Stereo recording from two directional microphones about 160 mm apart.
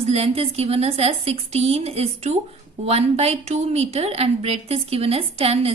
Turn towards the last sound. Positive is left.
turn(degrees=-40)  # may be behind; listen again after turning